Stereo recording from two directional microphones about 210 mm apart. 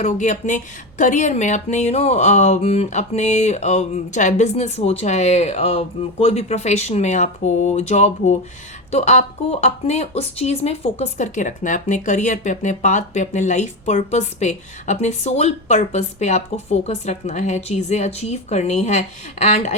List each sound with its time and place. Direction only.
0.0 s speech: 35° left (ahead or behind)